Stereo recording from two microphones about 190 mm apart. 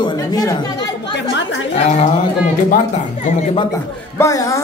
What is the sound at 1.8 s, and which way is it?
Speech, 35° left (ahead or behind).